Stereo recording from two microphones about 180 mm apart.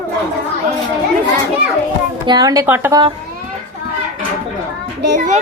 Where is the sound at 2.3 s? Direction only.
20° right (ahead or behind).